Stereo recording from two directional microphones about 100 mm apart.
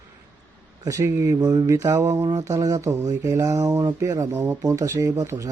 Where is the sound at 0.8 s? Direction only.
35° right (ahead or behind).